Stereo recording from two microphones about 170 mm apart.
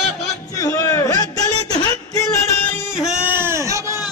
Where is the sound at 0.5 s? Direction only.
20° left (ahead or behind).